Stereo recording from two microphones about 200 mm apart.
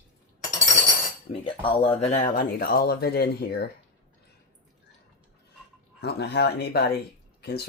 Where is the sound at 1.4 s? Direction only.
25° left (ahead or behind); by 3.6 s 50° left (ahead or behind).